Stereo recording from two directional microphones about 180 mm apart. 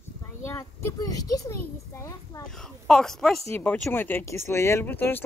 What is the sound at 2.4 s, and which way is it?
A child's voice, 5° left (ahead or behind).